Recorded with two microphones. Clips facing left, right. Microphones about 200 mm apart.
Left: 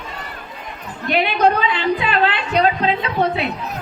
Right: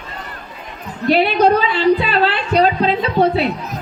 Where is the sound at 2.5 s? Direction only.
35° right (ahead or behind).